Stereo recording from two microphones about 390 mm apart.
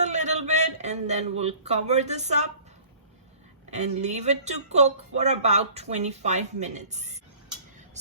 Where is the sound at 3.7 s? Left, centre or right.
Centre.